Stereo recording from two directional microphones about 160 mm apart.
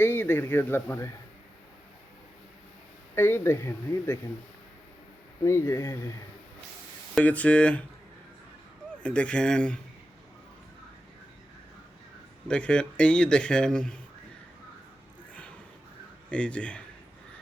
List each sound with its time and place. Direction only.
0.0 s speech: 15° left (ahead or behind)
3.2 s speech: 15° left (ahead or behind)
5.5 s speech: 15° left (ahead or behind)
7.2 s speech: 10° left (ahead or behind)
9.0 s speech: 5° left (ahead or behind)
12.5 s a man's voice: 5° left (ahead or behind)
16.3 s speech: 5° left (ahead or behind)